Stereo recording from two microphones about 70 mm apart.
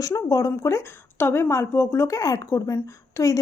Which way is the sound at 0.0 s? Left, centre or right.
Left.